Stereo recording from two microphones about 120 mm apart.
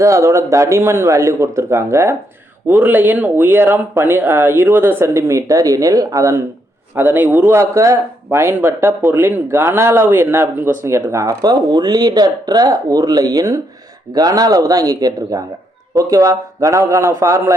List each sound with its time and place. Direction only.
0.0 s speech: 25° right (ahead or behind)
6.9 s speech: 15° right (ahead or behind)